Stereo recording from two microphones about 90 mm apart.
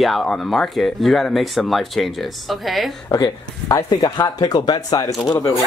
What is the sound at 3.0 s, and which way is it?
Speech, 45° left (ahead or behind).